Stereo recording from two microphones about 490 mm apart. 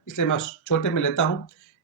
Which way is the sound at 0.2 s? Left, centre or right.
Left.